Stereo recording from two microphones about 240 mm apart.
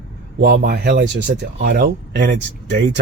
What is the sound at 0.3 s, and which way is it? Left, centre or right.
Speech, right.